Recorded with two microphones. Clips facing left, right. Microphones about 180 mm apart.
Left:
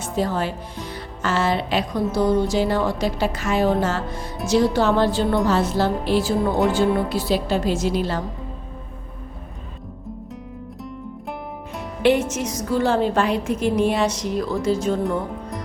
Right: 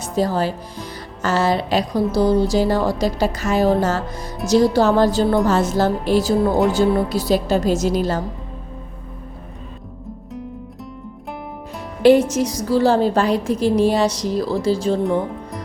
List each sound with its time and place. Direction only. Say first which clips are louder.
0.0 s a woman's voice: right 3 dB; 35° right (ahead or behind)
12.3 s a woman's voice: right 5 dB; 35° right (ahead or behind)
15.0 s speech: right 4 dB; centre (ahead or behind)